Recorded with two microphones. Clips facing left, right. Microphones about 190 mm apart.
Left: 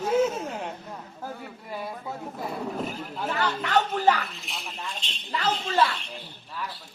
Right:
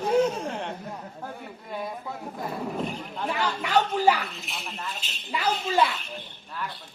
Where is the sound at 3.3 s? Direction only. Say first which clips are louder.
Even; 10° right (ahead or behind).